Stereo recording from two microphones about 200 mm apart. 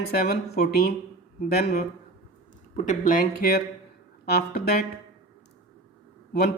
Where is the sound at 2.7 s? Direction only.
40° left (ahead or behind).